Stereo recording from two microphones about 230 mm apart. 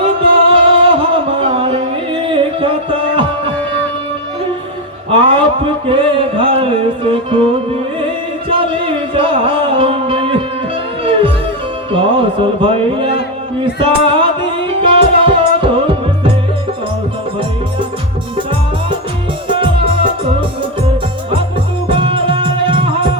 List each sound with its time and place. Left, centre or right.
0.2 s music: right
5.9 s music: right
8.4 s music: right
19.5 s music: right
21.8 s music: right